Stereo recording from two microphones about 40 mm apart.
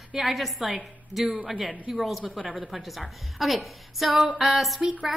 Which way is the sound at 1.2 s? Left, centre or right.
Right.